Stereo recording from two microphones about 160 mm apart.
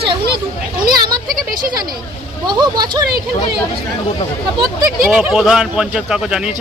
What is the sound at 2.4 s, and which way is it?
Speech, 25° right (ahead or behind).